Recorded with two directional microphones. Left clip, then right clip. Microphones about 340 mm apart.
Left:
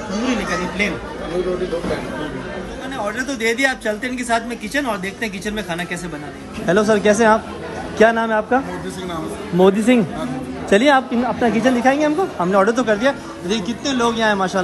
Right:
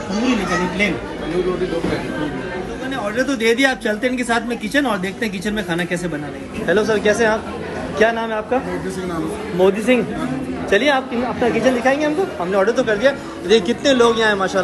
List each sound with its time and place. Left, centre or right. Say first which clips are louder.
3.3 s speech: right 1 dB; centre
6.7 s a man's voice: left 1 dB; left
9.6 s a man's voice: left 1 dB; left